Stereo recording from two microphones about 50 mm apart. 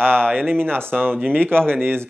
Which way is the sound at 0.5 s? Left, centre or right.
Right.